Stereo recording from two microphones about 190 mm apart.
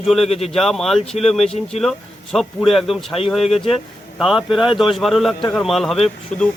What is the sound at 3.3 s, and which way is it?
Speech, centre (ahead or behind).